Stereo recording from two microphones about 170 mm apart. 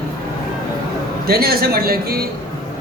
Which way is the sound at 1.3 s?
65° right (ahead or behind).